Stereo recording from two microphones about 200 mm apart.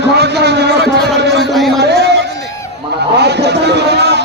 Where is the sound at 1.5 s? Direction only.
Centre (ahead or behind).